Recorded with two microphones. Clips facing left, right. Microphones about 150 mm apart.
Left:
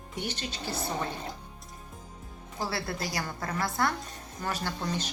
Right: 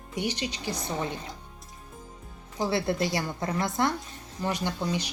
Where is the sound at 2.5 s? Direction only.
20° right (ahead or behind).